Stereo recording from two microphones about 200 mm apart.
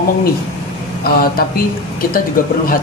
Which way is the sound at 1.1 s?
50° left (ahead or behind).